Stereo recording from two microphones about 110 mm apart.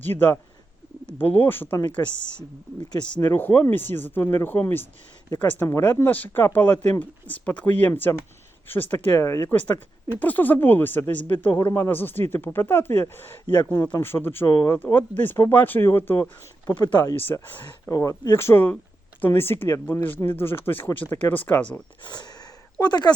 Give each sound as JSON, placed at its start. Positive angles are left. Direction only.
{"t": 0.0, "sound": "speech", "side_deg": 20}
{"t": 2.0, "sound": "speech", "side_deg": 35}
{"t": 3.2, "sound": "speech", "side_deg": 20}
{"t": 10.2, "sound": "speech", "side_deg": 15}
{"t": 16.6, "sound": "speech", "side_deg": 40}
{"t": 17.4, "sound": "speech", "side_deg": 20}
{"t": 17.9, "sound": "speech", "side_deg": 30}
{"t": 22.0, "sound": "speech", "side_deg": 40}